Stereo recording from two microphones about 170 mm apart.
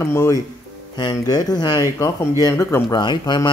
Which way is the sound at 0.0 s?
15° left (ahead or behind).